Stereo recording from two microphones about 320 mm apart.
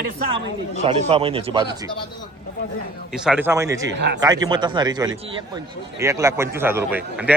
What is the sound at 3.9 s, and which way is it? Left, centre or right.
Speech, right.